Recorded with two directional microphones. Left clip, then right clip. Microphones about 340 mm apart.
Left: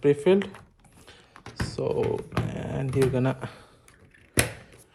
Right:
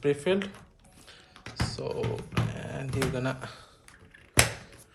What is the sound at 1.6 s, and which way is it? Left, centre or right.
Speech, centre.